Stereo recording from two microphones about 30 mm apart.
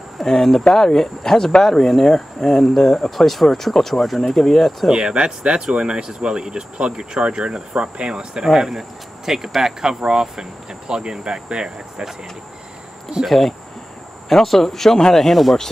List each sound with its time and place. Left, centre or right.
0.2 s speech: centre
3.2 s speech: centre
4.9 s speech: right
8.5 s speech: centre
9.6 s cricket: centre
13.3 s speech: centre